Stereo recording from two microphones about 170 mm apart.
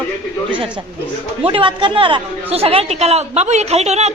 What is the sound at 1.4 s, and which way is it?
A woman's voice, 30° right (ahead or behind).